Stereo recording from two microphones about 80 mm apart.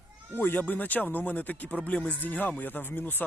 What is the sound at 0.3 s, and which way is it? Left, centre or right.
Speech, left.